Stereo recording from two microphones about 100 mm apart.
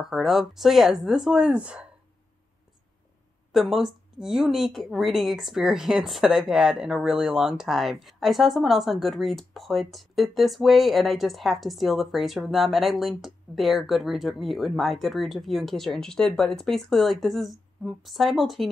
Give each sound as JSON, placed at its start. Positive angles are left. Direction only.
{"t": 0.0, "sound": "a woman's voice", "side_deg": 0}
{"t": 3.5, "sound": "a woman's voice", "side_deg": 0}